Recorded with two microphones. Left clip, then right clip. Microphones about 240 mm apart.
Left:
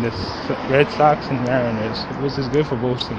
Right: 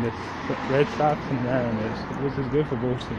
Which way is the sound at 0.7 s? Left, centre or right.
Centre.